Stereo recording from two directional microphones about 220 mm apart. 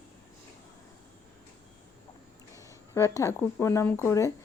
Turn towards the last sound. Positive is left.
turn(degrees=10)  # may be behind; listen again after turning